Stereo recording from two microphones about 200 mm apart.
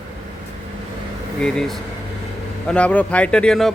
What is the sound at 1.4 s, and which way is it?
A man's voice, 5° left (ahead or behind).